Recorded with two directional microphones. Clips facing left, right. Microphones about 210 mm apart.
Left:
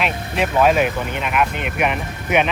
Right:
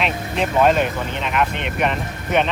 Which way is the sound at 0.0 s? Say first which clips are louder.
Even; 5° left (ahead or behind).